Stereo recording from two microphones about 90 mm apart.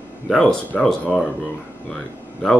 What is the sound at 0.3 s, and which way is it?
Speech, 10° left (ahead or behind).